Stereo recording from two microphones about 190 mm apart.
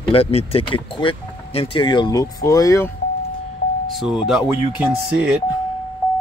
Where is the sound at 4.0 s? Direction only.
Centre (ahead or behind).